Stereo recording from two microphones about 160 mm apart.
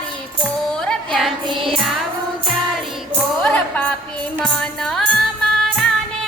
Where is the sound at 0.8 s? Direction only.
5° left (ahead or behind).